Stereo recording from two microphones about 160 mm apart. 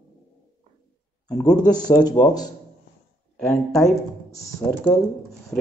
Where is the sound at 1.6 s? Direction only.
25° left (ahead or behind).